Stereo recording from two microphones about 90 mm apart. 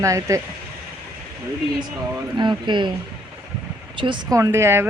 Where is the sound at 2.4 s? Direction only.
60° right (ahead or behind).